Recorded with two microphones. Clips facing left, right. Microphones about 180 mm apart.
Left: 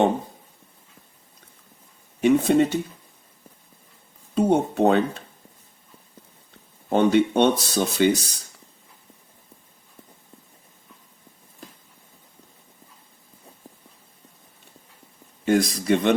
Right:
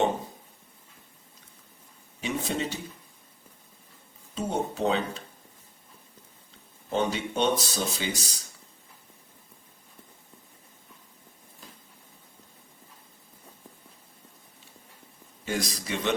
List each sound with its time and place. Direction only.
2.2 s speech: 55° left (ahead or behind)
4.4 s speech: 60° left (ahead or behind)
6.9 s speech: 60° left (ahead or behind)
15.4 s speech: 55° left (ahead or behind)